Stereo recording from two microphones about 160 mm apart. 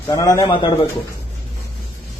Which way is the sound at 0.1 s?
20° left (ahead or behind).